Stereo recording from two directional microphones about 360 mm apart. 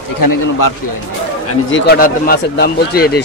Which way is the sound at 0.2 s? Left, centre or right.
Left.